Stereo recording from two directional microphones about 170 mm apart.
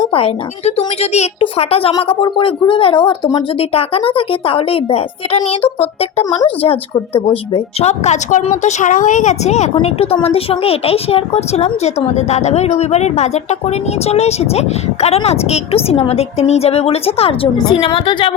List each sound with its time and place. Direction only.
0.1 s a woman's voice: 35° left (ahead or behind)